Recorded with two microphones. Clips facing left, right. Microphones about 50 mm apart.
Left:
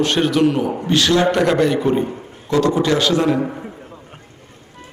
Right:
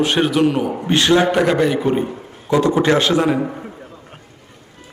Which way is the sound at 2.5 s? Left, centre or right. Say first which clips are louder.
Right 1 dB; centre.